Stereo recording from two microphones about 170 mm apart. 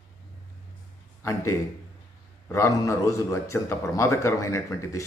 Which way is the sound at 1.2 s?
15° left (ahead or behind).